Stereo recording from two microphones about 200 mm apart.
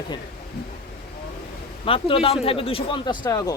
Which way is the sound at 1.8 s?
30° left (ahead or behind).